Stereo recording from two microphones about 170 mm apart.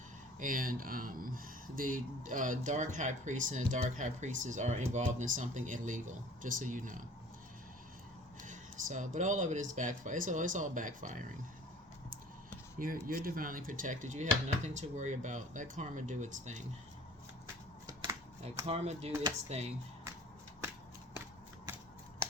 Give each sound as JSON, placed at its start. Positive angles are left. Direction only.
{"t": 0.3, "sound": "speech", "side_deg": -55}
{"t": 8.4, "sound": "speech", "side_deg": -45}
{"t": 12.8, "sound": "speech", "side_deg": -55}
{"t": 18.6, "sound": "speech", "side_deg": -35}